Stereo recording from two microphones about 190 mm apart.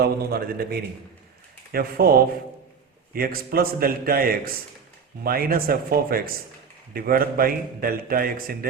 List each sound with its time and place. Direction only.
0.0 s a man's voice: 55° right (ahead or behind)
3.1 s a man's voice: 50° right (ahead or behind)